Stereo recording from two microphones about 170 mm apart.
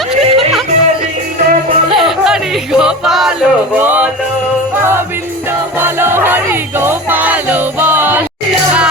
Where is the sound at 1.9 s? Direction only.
5° right (ahead or behind).